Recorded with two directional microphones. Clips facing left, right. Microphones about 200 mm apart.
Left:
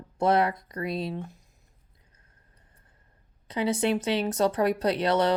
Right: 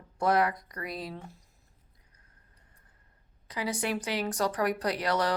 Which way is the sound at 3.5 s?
25° left (ahead or behind).